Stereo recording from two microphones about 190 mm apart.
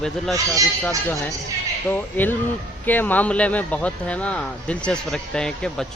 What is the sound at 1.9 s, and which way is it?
A man's voice, 10° left (ahead or behind).